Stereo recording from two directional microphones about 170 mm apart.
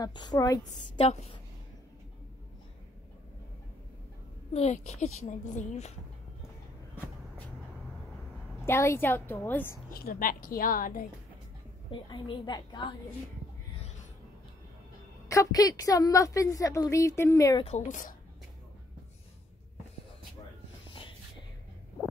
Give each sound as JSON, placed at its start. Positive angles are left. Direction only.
{"t": 0.0, "sound": "a woman's voice", "side_deg": 25}
{"t": 1.0, "sound": "a woman's voice", "side_deg": 40}
{"t": 4.6, "sound": "a woman's voice", "side_deg": 40}
{"t": 8.6, "sound": "a woman's voice", "side_deg": 15}
{"t": 9.8, "sound": "a woman's voice", "side_deg": 55}
{"t": 11.9, "sound": "a woman's voice", "side_deg": 25}
{"t": 15.2, "sound": "a woman's voice", "side_deg": 20}
{"t": 17.6, "sound": "a woman's voice", "side_deg": 45}